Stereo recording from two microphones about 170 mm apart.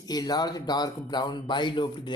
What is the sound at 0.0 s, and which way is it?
Speech, 25° left (ahead or behind).